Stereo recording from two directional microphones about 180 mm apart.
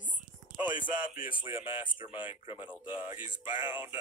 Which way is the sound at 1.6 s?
30° left (ahead or behind).